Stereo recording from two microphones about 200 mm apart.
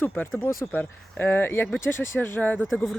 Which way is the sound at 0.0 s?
10° left (ahead or behind).